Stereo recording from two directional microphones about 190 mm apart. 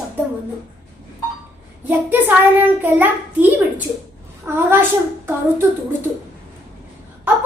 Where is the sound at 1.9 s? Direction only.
10° right (ahead or behind).